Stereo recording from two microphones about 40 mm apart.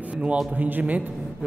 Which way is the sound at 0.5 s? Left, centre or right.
Right.